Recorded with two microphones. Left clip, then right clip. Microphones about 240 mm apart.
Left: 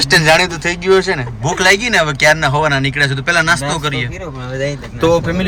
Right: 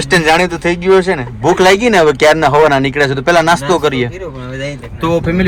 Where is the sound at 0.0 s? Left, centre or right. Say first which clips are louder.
Even; centre.